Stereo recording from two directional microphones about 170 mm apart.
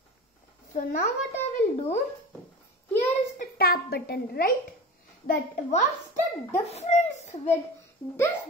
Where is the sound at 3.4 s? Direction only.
65° left (ahead or behind).